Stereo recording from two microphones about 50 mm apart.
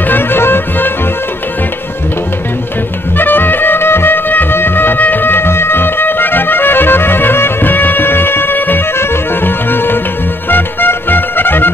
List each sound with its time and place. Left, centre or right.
0.1 s music: left
3.2 s music: left
8.9 s music: left